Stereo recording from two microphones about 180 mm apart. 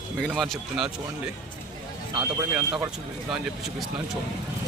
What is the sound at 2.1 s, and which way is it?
Speech, 15° right (ahead or behind).